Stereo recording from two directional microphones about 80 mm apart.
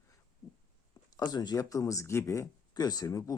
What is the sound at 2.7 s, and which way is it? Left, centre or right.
Speech, left.